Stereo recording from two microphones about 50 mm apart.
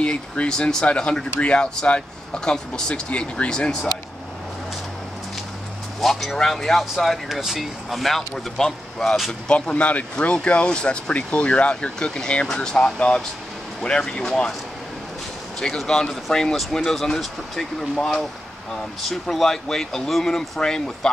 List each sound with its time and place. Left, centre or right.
0.0 s speech: left
5.9 s speech: centre
9.5 s speech: left
15.8 s speech: centre